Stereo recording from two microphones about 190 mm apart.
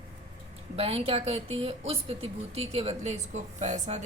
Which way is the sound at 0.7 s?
30° right (ahead or behind).